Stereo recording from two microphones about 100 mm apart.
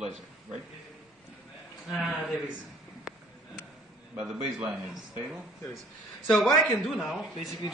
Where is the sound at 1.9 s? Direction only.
5° right (ahead or behind).